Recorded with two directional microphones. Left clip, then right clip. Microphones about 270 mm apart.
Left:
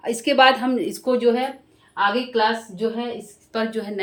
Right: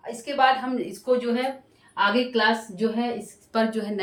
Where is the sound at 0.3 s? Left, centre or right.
Left.